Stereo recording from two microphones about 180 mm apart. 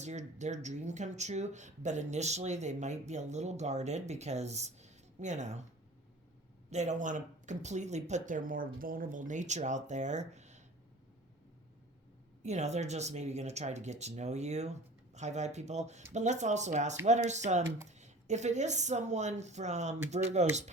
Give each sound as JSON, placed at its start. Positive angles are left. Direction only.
{"t": 0.0, "sound": "speech", "side_deg": -40}
{"t": 6.7, "sound": "speech", "side_deg": -40}
{"t": 12.4, "sound": "speech", "side_deg": -40}